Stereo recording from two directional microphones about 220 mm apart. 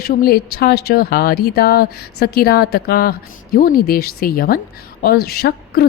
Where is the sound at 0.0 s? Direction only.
40° left (ahead or behind).